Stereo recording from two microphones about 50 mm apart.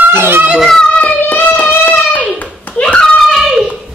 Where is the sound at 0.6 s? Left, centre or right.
Centre.